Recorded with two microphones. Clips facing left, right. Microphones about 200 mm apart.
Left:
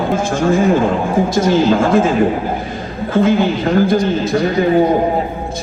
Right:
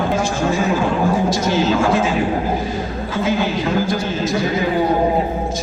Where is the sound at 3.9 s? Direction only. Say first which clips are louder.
Left 5 dB; 55° left (ahead or behind).